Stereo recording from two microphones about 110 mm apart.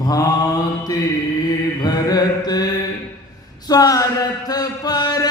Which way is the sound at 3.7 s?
35° left (ahead or behind).